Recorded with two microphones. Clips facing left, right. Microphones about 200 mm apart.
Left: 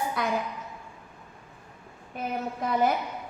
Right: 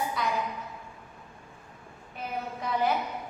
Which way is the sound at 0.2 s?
55° left (ahead or behind).